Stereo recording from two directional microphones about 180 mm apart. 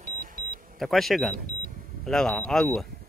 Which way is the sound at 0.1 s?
50° right (ahead or behind).